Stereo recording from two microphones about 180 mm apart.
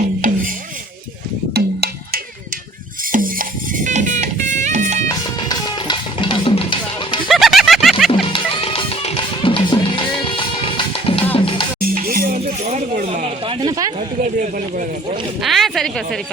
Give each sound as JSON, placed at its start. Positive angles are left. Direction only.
{"t": 1.5, "sound": "music", "side_deg": -60}
{"t": 3.1, "sound": "music", "side_deg": -50}
{"t": 5.0, "sound": "music", "side_deg": 25}
{"t": 7.3, "sound": "a sound", "side_deg": 0}
{"t": 8.1, "sound": "music", "side_deg": 30}
{"t": 11.8, "sound": "music", "side_deg": -55}
{"t": 14.2, "sound": "speech", "side_deg": -45}
{"t": 15.4, "sound": "speech", "side_deg": 0}